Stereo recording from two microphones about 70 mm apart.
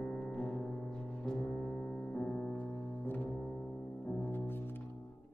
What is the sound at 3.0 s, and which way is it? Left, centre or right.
Music, left.